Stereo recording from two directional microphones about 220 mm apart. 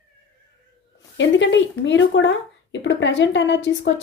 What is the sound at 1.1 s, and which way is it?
A woman's voice, 55° left (ahead or behind).